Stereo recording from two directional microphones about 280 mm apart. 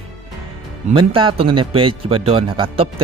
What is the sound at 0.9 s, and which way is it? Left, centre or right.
Speech, centre.